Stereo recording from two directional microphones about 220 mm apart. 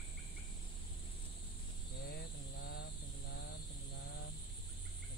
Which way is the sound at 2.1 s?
45° left (ahead or behind).